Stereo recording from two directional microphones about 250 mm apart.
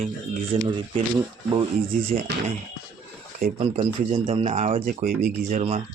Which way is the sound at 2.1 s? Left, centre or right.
Right.